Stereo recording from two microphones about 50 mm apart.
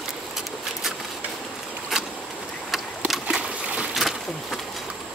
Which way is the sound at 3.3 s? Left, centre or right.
Right.